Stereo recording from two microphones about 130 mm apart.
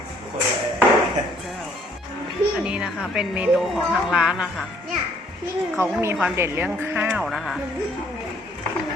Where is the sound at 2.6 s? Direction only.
5° right (ahead or behind).